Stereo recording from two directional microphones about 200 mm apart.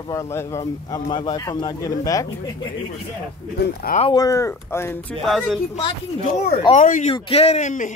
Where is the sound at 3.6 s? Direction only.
50° left (ahead or behind).